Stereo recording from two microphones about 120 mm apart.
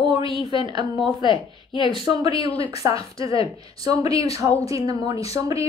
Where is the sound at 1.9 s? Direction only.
40° right (ahead or behind).